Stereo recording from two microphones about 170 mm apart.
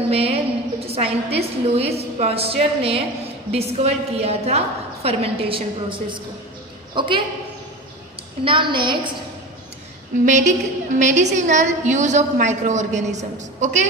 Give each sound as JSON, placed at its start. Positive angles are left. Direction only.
{"t": 0.1, "sound": "a woman's voice", "side_deg": -35}
{"t": 8.5, "sound": "a woman's voice", "side_deg": -30}
{"t": 10.2, "sound": "a woman's voice", "side_deg": -45}